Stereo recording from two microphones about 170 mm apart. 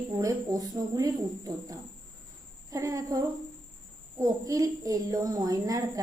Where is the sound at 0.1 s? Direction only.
20° right (ahead or behind).